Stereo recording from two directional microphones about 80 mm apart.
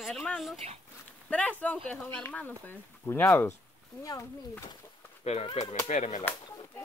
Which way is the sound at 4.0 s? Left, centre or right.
Left.